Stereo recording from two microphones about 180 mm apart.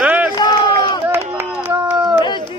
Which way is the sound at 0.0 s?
10° right (ahead or behind).